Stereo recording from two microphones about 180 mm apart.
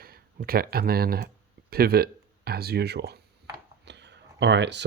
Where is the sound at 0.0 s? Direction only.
55° right (ahead or behind).